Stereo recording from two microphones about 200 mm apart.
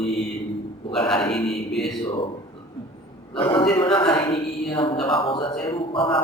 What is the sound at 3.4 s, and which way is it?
A man's voice, 25° left (ahead or behind).